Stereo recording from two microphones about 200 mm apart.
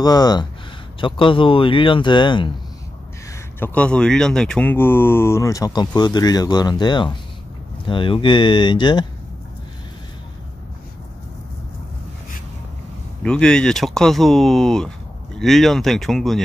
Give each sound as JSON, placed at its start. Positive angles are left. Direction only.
{"t": 0.0, "sound": "speech", "side_deg": 20}
{"t": 3.5, "sound": "speech", "side_deg": 10}
{"t": 13.2, "sound": "speech", "side_deg": 5}